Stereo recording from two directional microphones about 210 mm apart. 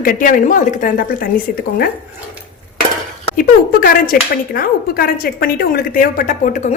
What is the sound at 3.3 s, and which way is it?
Speech, 40° left (ahead or behind).